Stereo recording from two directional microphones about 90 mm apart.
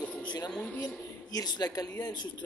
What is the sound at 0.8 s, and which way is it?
A man's voice, 45° left (ahead or behind).